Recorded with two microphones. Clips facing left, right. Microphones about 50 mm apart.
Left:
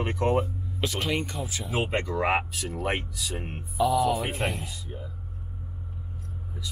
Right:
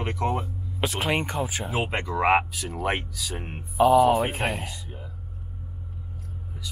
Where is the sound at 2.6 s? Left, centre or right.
Centre.